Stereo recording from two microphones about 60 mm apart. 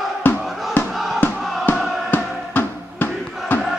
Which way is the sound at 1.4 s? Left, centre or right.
Centre.